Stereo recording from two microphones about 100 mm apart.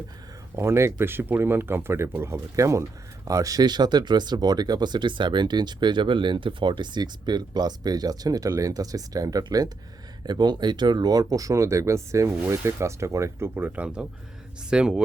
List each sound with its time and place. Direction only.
0.5 s speech: 25° right (ahead or behind); by 15.0 s 10° right (ahead or behind)